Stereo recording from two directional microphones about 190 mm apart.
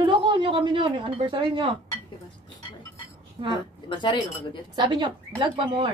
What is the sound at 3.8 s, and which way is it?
Speech, 25° left (ahead or behind).